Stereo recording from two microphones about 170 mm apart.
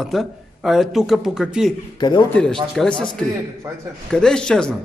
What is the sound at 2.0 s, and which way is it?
Speech, 25° left (ahead or behind).